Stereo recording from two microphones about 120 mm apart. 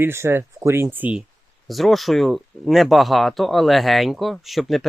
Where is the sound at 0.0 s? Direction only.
20° right (ahead or behind).